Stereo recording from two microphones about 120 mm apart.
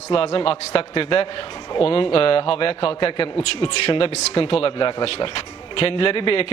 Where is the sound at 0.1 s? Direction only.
50° left (ahead or behind).